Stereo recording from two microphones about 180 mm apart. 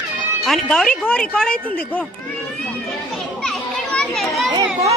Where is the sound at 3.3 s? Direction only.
Centre (ahead or behind).